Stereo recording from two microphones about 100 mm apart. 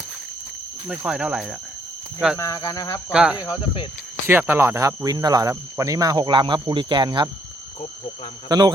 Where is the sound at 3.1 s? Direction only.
10° right (ahead or behind).